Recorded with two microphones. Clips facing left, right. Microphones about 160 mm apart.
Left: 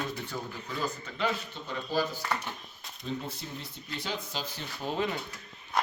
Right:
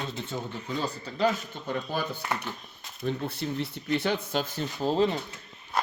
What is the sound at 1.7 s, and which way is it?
Speech, 60° right (ahead or behind).